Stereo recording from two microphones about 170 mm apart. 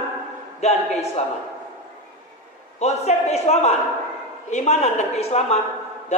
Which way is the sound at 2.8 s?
40° left (ahead or behind).